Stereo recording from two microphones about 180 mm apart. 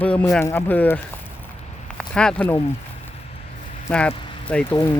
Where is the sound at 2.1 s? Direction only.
5° left (ahead or behind).